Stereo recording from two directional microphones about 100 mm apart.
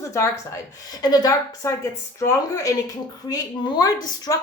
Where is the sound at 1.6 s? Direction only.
30° left (ahead or behind).